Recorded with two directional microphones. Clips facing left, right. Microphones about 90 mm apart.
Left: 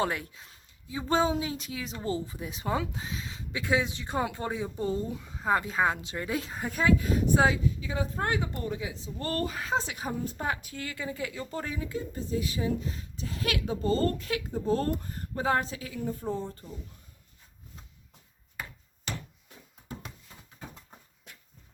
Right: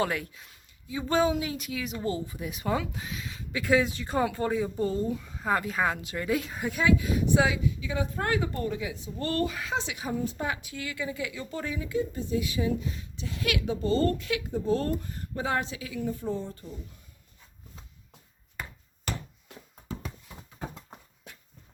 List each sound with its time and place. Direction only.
0.0 s speech: 30° left (ahead or behind)
9.2 s a woman's voice: 35° left (ahead or behind)
19.5 s music: 85° right
20.9 s horse: 85° right